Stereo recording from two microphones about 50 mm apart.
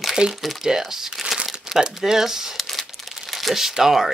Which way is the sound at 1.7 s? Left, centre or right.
Centre.